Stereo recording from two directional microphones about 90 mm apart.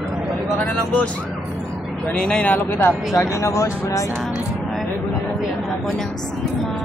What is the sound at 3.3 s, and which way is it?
Speech, 35° left (ahead or behind).